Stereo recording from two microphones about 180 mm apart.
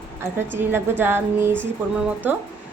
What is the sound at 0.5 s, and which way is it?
Speech, 10° right (ahead or behind).